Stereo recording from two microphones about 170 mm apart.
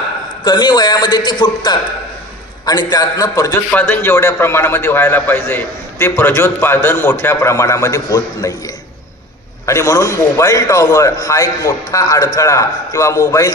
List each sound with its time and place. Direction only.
0.4 s a man's voice: 25° left (ahead or behind)
9.7 s a man's voice: 20° left (ahead or behind)